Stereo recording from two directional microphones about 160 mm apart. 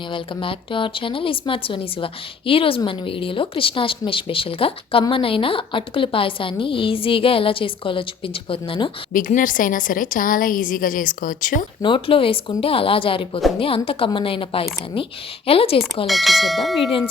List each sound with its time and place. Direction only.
0.1 s a woman's voice: 30° left (ahead or behind)
9.1 s a woman's voice: 55° left (ahead or behind)
11.8 s a woman's voice: 30° left (ahead or behind)
16.0 s bell: centre (ahead or behind)